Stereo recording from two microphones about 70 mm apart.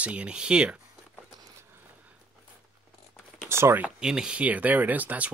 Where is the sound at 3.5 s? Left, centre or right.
Right.